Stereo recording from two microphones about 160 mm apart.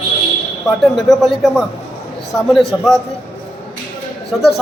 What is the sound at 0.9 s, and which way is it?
A man's voice, centre (ahead or behind).